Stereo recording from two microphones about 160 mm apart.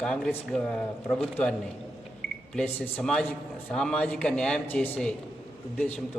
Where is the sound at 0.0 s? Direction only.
5° left (ahead or behind).